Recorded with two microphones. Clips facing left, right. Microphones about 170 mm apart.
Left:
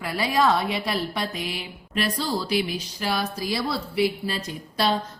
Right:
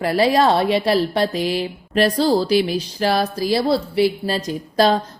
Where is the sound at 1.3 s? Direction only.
35° right (ahead or behind).